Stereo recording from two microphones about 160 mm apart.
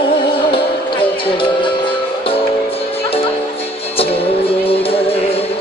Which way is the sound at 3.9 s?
35° left (ahead or behind).